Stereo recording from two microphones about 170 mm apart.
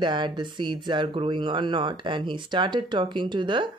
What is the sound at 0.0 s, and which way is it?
Speech, 25° right (ahead or behind).